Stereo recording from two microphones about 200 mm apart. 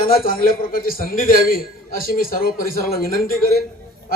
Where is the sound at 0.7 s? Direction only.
45° left (ahead or behind).